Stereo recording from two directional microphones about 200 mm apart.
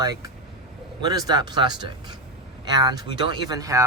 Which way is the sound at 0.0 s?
20° right (ahead or behind).